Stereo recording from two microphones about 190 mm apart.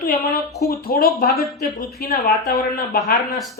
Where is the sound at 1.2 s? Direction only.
55° left (ahead or behind).